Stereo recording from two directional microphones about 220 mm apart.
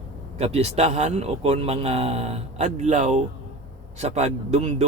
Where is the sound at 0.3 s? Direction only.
30° right (ahead or behind).